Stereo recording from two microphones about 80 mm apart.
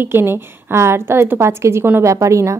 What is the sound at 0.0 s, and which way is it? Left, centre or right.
A woman's voice, right.